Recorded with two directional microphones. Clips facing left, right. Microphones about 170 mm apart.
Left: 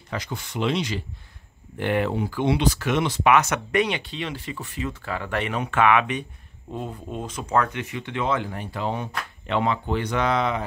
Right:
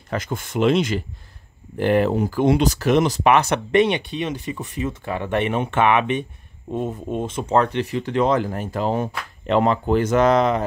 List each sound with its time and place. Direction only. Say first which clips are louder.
0.1 s speech: right 6 dB; 50° right (ahead or behind)
1.8 s speech: right 6 dB; 40° right (ahead or behind); by 6.8 s 15° right (ahead or behind)
7.2 s speech: right 4 dB; 25° right (ahead or behind); by 10.6 s 45° right (ahead or behind)